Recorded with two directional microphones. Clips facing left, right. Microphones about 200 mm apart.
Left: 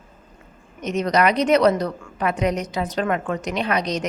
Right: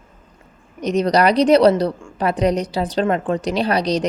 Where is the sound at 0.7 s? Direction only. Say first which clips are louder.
Right 4 dB; 35° right (ahead or behind).